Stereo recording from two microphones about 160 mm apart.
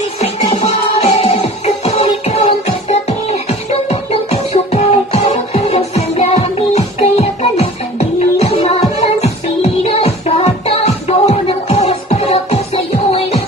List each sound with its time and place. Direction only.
0.9 s music: 40° left (ahead or behind)